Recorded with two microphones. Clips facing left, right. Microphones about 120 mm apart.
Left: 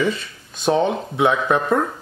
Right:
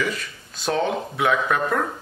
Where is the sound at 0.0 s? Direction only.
25° left (ahead or behind).